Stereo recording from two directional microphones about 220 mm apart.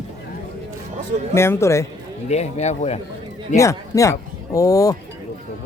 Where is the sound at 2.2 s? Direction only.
30° left (ahead or behind).